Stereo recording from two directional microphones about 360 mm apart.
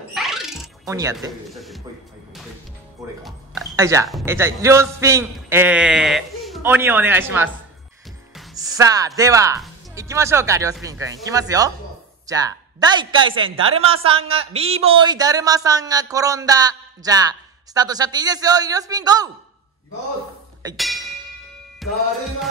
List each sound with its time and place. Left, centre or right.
0.1 s music: centre
3.2 s a man's voice: centre
20.7 s speech: centre
21.8 s music: centre